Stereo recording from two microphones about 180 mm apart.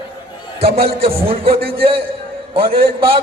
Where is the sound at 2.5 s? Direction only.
30° right (ahead or behind).